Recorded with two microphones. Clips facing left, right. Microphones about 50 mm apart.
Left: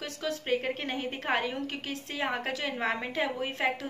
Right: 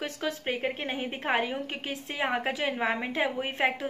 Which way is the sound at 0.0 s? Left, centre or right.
Right.